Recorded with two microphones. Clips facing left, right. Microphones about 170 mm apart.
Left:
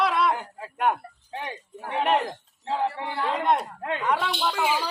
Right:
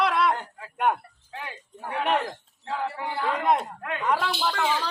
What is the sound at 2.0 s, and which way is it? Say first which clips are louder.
Speech: left 2 dB; centre (ahead or behind).